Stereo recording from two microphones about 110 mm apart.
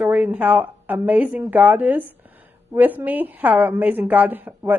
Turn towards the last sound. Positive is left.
turn(degrees=-15)  # may be behind; listen again after turning